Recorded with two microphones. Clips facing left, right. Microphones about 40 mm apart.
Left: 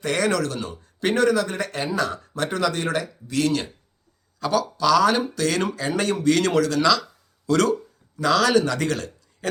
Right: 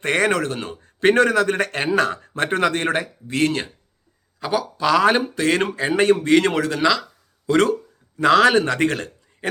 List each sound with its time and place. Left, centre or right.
0.0 s speech: right
4.4 s speech: right
4.9 s a man's voice: right